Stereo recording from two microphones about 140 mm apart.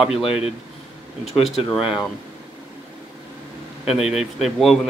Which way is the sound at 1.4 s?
Centre (ahead or behind).